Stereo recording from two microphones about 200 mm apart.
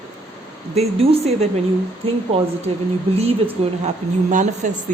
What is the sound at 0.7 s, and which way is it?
Speech, 30° right (ahead or behind).